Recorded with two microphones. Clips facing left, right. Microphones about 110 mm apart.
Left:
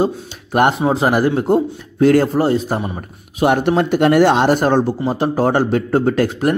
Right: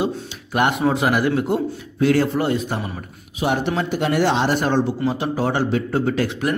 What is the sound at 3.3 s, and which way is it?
A man's voice, 55° left (ahead or behind).